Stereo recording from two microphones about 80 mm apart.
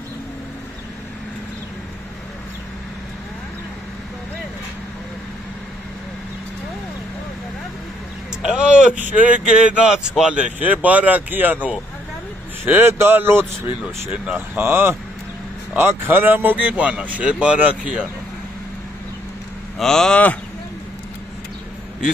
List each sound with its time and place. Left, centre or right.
8.5 s a sound: centre
9.0 s speech: centre
14.1 s speech: centre
19.8 s speech: centre